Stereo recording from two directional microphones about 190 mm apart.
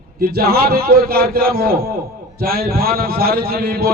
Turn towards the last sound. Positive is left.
turn(degrees=-50)  # may be behind; listen again after turning